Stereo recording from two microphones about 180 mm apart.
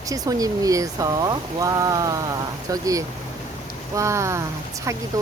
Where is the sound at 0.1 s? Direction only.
20° right (ahead or behind).